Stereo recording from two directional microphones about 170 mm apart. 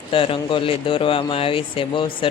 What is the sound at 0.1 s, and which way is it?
Speech, 30° left (ahead or behind).